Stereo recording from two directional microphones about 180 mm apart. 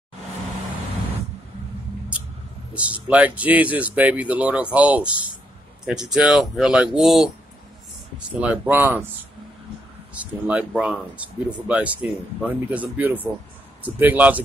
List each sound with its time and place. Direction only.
2.7 s speech: 5° right (ahead or behind)
8.4 s speech: 10° right (ahead or behind)
10.1 s speech: 10° right (ahead or behind)